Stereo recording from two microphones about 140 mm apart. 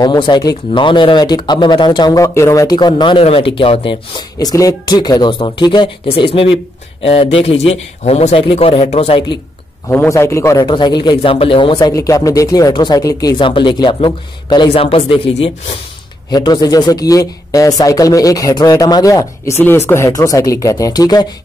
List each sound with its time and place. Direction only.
0.0 s speech: 30° left (ahead or behind)
3.0 s speech: 40° left (ahead or behind)
9.8 s a man's voice: 20° left (ahead or behind)
10.6 s speech: 35° left (ahead or behind)
11.8 s a man's voice: 25° left (ahead or behind)
14.7 s speech: 45° left (ahead or behind)
16.3 s a man's voice: 30° left (ahead or behind)